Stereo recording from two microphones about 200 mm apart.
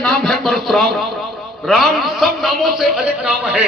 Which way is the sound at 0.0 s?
Centre (ahead or behind).